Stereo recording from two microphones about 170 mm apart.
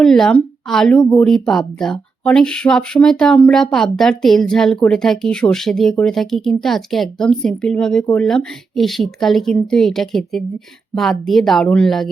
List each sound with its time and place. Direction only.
0.0 s speech: 5° left (ahead or behind)